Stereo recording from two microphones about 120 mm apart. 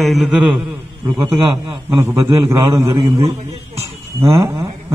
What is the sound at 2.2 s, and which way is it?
Speech, 25° right (ahead or behind).